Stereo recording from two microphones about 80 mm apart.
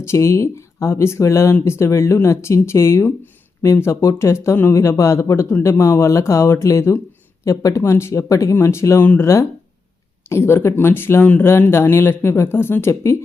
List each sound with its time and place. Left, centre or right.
0.0 s speech: left